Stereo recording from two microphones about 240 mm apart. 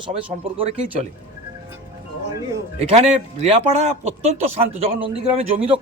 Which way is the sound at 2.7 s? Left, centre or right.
Right.